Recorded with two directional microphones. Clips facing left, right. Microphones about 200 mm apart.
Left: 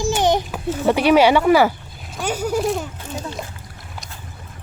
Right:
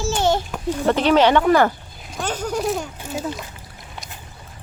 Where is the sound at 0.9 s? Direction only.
10° left (ahead or behind).